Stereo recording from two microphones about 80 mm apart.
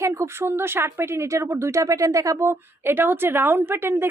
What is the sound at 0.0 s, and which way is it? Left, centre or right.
A woman's voice, right.